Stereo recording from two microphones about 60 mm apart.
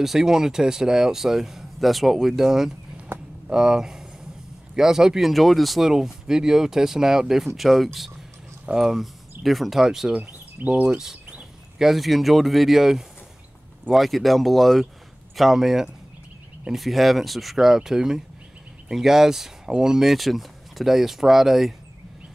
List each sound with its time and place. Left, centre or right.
0.0 s speech: centre
3.1 s a sound: right
3.4 s speech: centre
10.1 s speech: centre
11.8 s speech: centre